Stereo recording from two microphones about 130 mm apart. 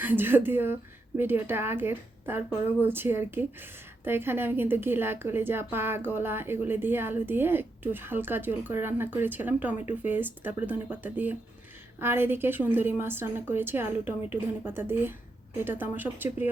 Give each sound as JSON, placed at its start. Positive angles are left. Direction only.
{"t": 0.0, "sound": "a woman's voice", "side_deg": -15}